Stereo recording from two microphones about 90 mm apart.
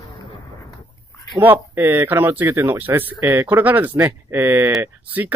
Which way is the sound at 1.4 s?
25° right (ahead or behind).